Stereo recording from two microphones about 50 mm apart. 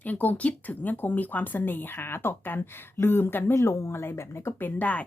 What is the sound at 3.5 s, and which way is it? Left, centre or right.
Speech, left.